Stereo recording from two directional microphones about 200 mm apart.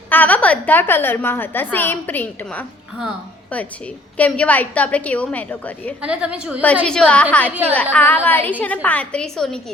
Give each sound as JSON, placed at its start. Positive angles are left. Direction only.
{"t": 0.1, "sound": "a woman's voice", "side_deg": 10}
{"t": 6.0, "sound": "a woman's voice", "side_deg": -5}